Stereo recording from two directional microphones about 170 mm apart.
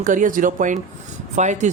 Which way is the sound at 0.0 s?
50° right (ahead or behind).